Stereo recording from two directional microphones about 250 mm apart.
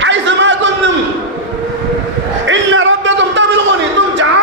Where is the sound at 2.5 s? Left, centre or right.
Right.